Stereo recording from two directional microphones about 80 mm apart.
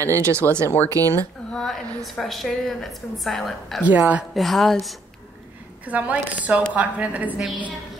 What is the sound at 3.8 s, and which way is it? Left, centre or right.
Speech, centre.